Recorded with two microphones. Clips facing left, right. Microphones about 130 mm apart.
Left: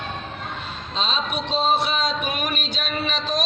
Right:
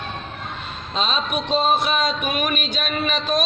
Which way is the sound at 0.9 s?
55° right (ahead or behind).